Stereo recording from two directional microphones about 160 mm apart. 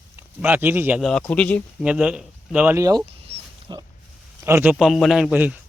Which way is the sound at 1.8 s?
5° right (ahead or behind).